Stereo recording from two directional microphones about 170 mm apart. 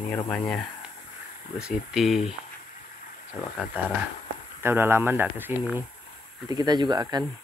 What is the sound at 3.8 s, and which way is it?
Speech, 10° right (ahead or behind).